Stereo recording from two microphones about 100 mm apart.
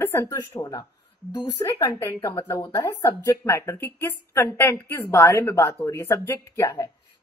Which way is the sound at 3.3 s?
30° left (ahead or behind).